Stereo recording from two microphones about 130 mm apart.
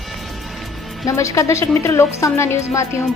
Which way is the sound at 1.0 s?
25° left (ahead or behind).